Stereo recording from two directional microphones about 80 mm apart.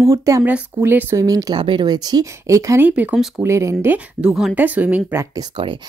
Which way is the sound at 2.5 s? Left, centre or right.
Right.